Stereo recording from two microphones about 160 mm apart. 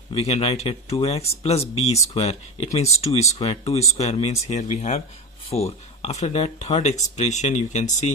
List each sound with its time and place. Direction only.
0.1 s speech: 40° left (ahead or behind)